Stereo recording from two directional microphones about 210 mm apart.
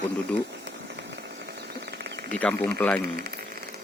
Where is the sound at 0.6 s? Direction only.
55° right (ahead or behind).